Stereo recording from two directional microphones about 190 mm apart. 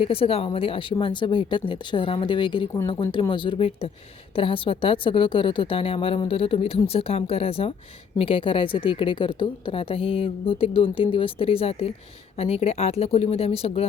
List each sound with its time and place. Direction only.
0.0 s a woman's voice: 30° left (ahead or behind)